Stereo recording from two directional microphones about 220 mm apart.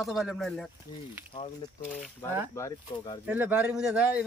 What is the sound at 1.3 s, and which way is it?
Speech, 30° left (ahead or behind).